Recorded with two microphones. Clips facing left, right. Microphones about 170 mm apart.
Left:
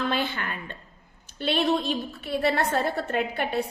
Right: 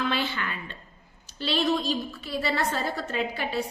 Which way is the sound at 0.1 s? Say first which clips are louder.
Left 1 dB; 50° left (ahead or behind).